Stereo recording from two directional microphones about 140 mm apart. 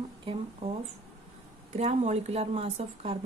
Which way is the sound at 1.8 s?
55° right (ahead or behind).